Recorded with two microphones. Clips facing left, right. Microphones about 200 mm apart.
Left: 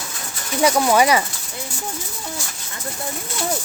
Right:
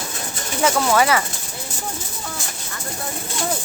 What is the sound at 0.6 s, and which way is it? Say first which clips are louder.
Speech: left 2 dB; 15° left (ahead or behind).